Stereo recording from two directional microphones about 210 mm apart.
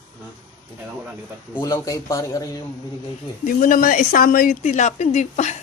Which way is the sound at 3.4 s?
40° left (ahead or behind).